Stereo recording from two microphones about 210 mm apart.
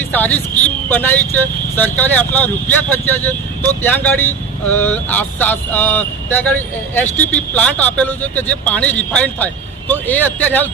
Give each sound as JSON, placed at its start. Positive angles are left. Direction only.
{"t": 0.1, "sound": "speech", "side_deg": 10}